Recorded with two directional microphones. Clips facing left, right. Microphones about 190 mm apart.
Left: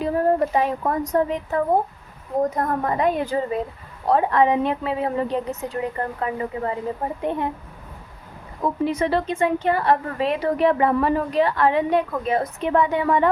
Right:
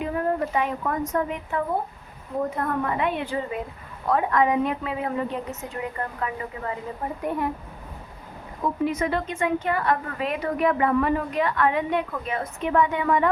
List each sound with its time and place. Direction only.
0.0 s a woman's voice: 35° left (ahead or behind)
8.8 s a woman's voice: 30° left (ahead or behind)